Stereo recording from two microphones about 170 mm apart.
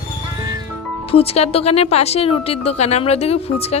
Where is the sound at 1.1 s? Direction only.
35° left (ahead or behind).